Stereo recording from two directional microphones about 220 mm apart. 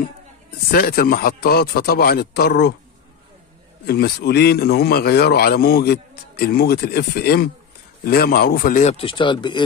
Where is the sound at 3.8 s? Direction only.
45° left (ahead or behind); by 9.6 s 20° left (ahead or behind).